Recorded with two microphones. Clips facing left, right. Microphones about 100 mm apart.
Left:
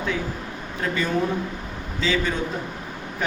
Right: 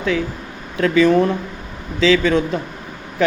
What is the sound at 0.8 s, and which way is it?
Speech, 90° right.